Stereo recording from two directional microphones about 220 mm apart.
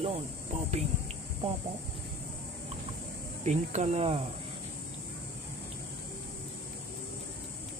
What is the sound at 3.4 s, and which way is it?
Speech, 30° right (ahead or behind).